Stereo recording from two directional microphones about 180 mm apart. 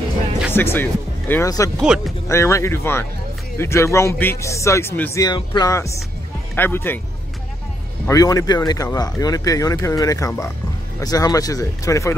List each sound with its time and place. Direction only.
0.5 s speech: 10° left (ahead or behind)
1.8 s speech: centre (ahead or behind)
2.2 s speech: 15° left (ahead or behind)
5.2 s speech: 25° left (ahead or behind)
8.1 s speech: 20° left (ahead or behind)